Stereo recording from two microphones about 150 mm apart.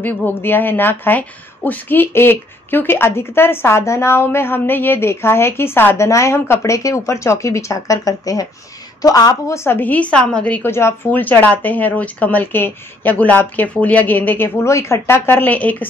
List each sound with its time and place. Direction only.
0.0 s a woman's voice: 15° left (ahead or behind)